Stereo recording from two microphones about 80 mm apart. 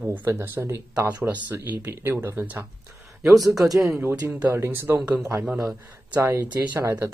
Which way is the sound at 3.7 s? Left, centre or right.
Right.